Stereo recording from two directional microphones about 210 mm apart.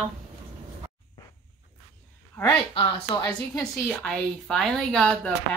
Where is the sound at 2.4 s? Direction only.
25° left (ahead or behind).